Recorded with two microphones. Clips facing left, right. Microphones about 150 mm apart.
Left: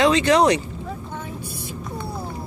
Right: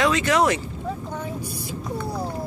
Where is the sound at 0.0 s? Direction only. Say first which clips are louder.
Left 4 dB; 25° left (ahead or behind).